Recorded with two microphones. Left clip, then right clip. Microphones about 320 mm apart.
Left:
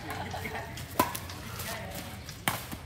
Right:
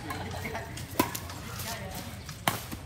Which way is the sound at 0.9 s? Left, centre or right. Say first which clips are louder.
Left 1 dB; centre.